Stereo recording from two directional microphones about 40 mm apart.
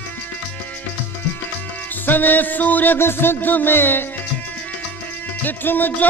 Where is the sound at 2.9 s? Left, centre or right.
Left.